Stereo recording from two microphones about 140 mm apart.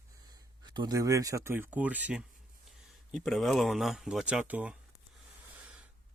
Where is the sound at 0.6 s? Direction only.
30° right (ahead or behind); by 2.3 s 10° right (ahead or behind).